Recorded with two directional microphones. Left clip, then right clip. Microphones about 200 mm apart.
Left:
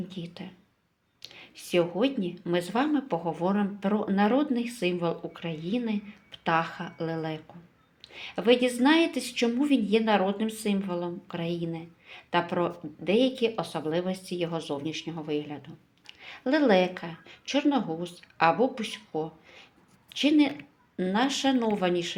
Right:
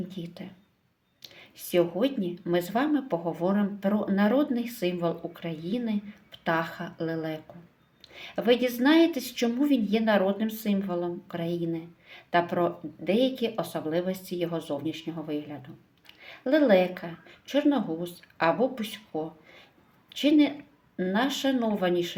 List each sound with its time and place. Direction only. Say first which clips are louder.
0.1 s a woman's voice: even; 20° left (ahead or behind)